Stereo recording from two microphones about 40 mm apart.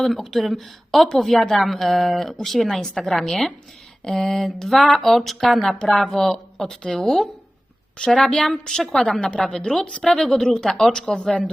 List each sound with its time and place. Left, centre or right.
0.2 s speech: centre
0.4 s a woman's voice: centre
8.4 s speech: centre
11.3 s a woman's voice: left